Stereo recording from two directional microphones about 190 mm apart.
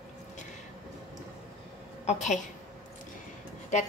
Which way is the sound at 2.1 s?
35° left (ahead or behind).